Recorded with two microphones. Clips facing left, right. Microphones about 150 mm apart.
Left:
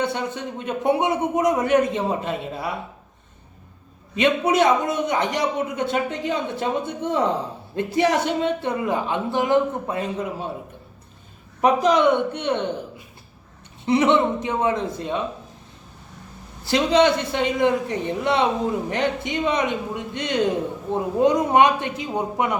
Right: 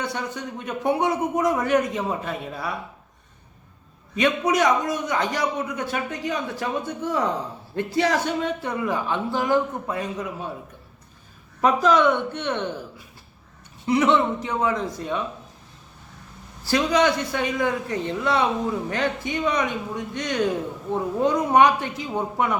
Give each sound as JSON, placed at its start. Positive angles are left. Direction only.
{"t": 0.0, "sound": "a man's voice", "side_deg": 25}
{"t": 4.1, "sound": "a man's voice", "side_deg": 25}
{"t": 11.6, "sound": "a woman's voice", "side_deg": 15}
{"t": 13.8, "sound": "a man's voice", "side_deg": 25}
{"t": 16.6, "sound": "a man's voice", "side_deg": 25}